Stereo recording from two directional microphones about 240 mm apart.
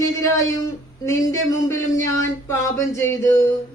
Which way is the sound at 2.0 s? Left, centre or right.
Centre.